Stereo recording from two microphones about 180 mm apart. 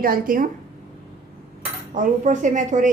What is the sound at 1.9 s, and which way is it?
Speech, 45° right (ahead or behind).